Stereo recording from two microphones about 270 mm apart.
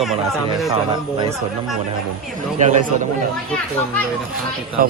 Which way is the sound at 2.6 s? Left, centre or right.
Right.